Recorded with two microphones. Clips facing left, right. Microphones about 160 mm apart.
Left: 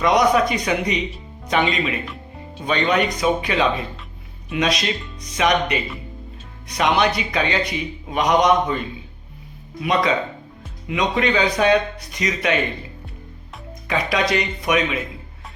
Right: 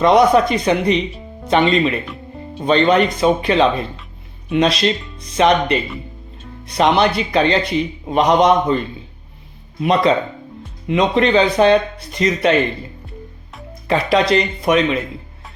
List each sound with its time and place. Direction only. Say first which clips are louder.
0.0 s a man's voice: right 5 dB; 30° right (ahead or behind)
9.8 s a man's voice: right 5 dB; 30° right (ahead or behind)
13.8 s speech: right 6 dB; 30° right (ahead or behind)